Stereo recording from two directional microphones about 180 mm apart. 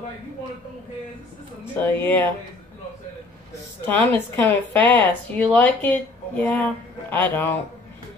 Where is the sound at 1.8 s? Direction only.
10° left (ahead or behind).